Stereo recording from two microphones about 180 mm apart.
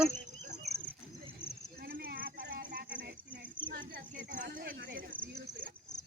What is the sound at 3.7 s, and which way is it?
Cricket, 50° right (ahead or behind).